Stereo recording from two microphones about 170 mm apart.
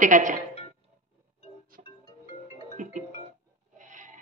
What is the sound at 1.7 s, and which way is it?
Music, 55° right (ahead or behind).